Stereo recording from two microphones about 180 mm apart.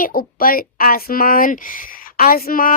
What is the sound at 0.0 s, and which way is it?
A woman's voice, 55° left (ahead or behind).